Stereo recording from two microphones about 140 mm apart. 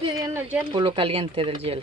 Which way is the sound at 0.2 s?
20° right (ahead or behind).